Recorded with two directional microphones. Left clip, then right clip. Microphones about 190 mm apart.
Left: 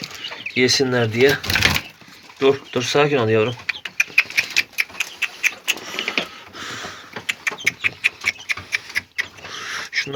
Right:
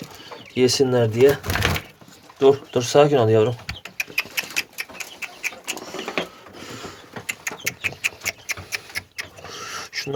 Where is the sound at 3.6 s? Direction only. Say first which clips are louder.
Left 8 dB; 20° right (ahead or behind).